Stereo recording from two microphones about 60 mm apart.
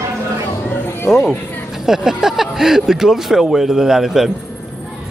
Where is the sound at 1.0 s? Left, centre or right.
Left.